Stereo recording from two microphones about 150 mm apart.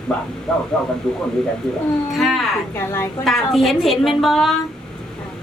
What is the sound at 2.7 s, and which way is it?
Speech, 15° left (ahead or behind).